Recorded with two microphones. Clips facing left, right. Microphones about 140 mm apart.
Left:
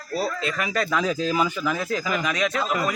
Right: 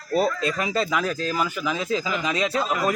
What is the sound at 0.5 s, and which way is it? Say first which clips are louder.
Speech: right 1 dB; 25° right (ahead or behind).